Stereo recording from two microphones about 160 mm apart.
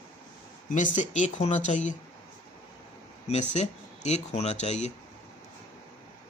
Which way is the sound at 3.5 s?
45° left (ahead or behind).